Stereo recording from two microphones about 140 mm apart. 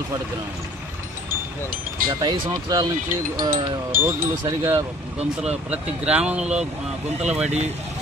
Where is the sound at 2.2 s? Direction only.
30° right (ahead or behind).